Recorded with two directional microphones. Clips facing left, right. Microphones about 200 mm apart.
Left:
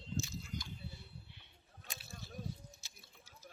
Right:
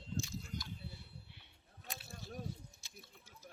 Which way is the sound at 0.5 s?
55° right (ahead or behind).